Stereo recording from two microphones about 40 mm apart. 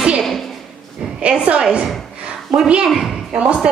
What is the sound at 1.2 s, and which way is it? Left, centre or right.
Speech, right.